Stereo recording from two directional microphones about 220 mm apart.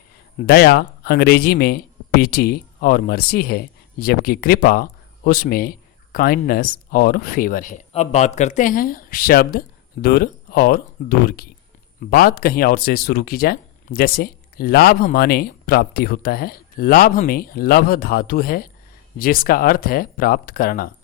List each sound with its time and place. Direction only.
0.4 s speech: 45° left (ahead or behind)